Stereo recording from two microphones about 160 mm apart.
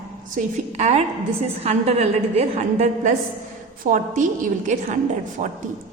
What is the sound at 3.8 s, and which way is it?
Speech, 55° right (ahead or behind).